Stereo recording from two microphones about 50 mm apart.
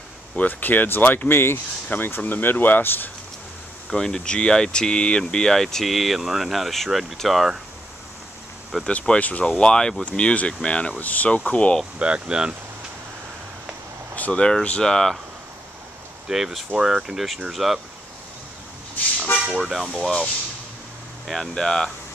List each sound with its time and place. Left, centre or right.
0.4 s speech: left
3.9 s speech: centre
8.8 s speech: left
11.0 s speech: left
12.0 s speech: centre
14.1 s speech: left
16.3 s speech: centre
19.4 s speech: centre
19.7 s speech: centre
21.3 s speech: centre